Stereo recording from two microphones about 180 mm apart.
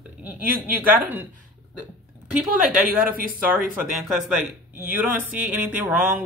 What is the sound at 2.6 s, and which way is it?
Speech, 50° right (ahead or behind).